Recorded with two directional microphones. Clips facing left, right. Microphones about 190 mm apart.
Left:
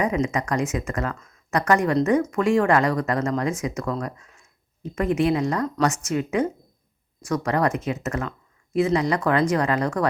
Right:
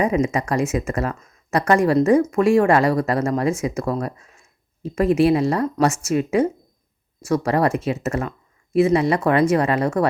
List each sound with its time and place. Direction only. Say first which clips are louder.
0.0 s speech: right 4 dB; 25° right (ahead or behind)
4.0 s a sound: right 4 dB; 25° right (ahead or behind)
5.1 s speech: right 4 dB; 30° right (ahead or behind)